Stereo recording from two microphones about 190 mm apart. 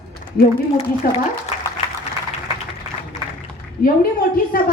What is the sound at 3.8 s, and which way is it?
Speech, 50° left (ahead or behind).